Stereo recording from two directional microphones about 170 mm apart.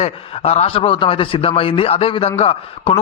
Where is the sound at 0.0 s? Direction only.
40° left (ahead or behind).